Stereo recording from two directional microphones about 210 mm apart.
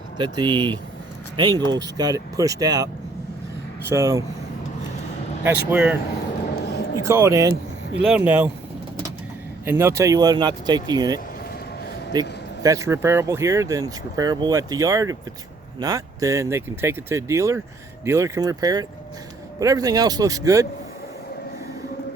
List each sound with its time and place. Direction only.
0.2 s speech: 20° right (ahead or behind)
5.4 s speech: 10° right (ahead or behind)
6.6 s a sound: 50° left (ahead or behind)
7.0 s speech: 15° right (ahead or behind)
9.6 s speech: 10° right (ahead or behind)